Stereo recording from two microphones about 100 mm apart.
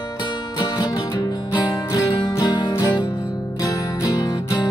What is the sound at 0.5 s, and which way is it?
Music, 45° left (ahead or behind).